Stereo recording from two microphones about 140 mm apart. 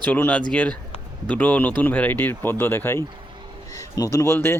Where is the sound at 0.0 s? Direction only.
10° left (ahead or behind).